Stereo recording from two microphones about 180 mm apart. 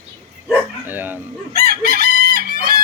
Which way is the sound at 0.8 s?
10° right (ahead or behind).